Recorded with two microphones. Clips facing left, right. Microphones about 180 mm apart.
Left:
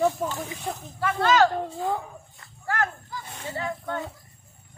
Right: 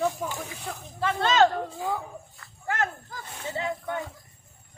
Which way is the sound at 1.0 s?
25° right (ahead or behind).